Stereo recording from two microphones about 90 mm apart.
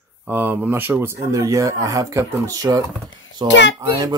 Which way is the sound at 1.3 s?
35° right (ahead or behind).